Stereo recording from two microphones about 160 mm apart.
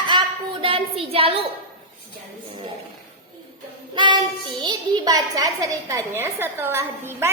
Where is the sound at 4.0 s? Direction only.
30° right (ahead or behind).